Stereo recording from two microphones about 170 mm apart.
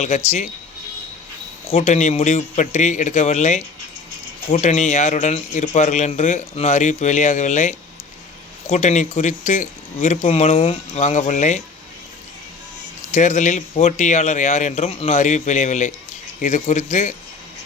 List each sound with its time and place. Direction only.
0.3 s a man's voice: 45° left (ahead or behind)
1.7 s a man's voice: 45° left (ahead or behind)
13.1 s a man's voice: 45° left (ahead or behind)